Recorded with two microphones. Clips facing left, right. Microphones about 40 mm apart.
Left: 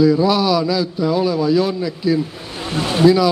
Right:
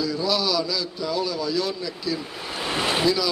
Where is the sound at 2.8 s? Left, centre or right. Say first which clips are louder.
Left 5 dB; centre.